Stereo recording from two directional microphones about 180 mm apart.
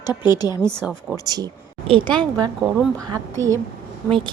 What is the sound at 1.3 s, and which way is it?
A woman's voice, 20° right (ahead or behind).